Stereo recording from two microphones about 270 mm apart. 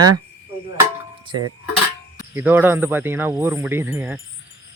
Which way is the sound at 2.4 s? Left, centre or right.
Centre.